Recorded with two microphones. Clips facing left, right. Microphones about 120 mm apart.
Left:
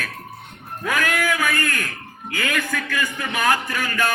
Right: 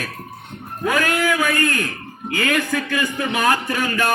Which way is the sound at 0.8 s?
20° right (ahead or behind).